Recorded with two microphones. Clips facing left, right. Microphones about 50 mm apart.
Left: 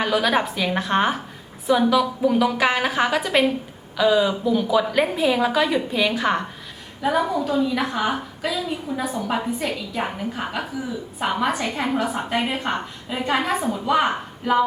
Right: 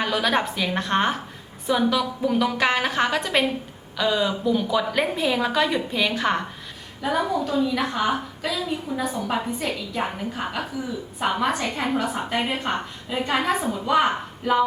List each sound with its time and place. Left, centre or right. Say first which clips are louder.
0.0 s a woman's voice: left 2 dB; centre
8.9 s a woman's voice: left 1 dB; left
9.2 s a woman's voice: left 1 dB; centre